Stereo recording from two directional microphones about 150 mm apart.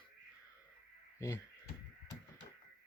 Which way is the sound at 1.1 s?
20° left (ahead or behind).